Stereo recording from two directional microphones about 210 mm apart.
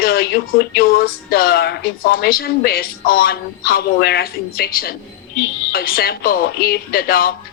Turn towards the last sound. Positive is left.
turn(degrees=45)  # may be behind; listen again after turning